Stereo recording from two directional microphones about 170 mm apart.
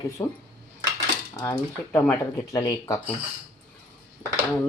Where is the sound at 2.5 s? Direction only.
20° left (ahead or behind).